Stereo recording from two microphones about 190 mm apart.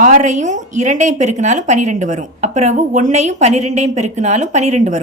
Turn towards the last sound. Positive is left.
turn(degrees=-35)  # may be behind; listen again after turning